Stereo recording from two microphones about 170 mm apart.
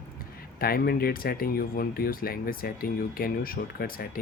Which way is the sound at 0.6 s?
60° left (ahead or behind).